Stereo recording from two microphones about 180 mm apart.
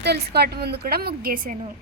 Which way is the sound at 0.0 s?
65° right (ahead or behind).